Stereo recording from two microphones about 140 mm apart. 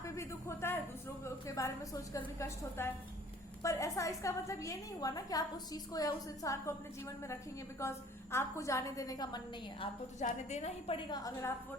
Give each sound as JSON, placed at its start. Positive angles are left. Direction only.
{"t": 0.0, "sound": "a sound", "side_deg": 20}
{"t": 1.2, "sound": "a woman's voice", "side_deg": 20}
{"t": 7.8, "sound": "a woman's voice", "side_deg": 20}
{"t": 10.2, "sound": "a woman's voice", "side_deg": 55}
{"t": 10.9, "sound": "a woman's voice", "side_deg": 30}